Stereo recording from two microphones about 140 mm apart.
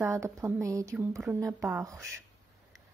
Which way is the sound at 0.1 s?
20° right (ahead or behind).